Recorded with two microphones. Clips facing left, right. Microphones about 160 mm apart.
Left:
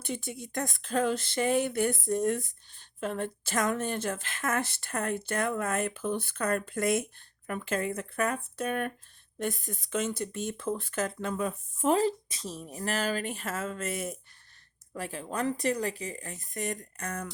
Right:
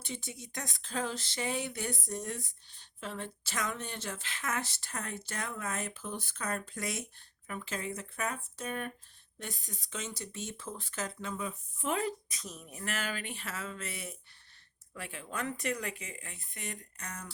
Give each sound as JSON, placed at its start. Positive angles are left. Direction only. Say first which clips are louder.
{"t": 0.0, "sound": "speech", "louder": "left 7 dB", "side_deg": 55}
{"t": 11.9, "sound": "speech", "louder": "left 8 dB", "side_deg": 30}